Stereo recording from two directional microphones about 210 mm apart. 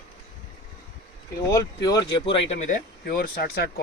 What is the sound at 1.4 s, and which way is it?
Speech, 15° left (ahead or behind).